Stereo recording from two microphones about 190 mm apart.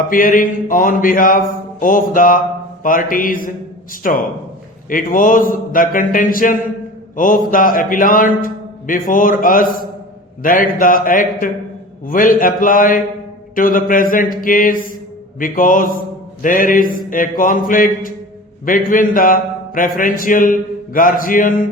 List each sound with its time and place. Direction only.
0.1 s a man's voice: 45° left (ahead or behind)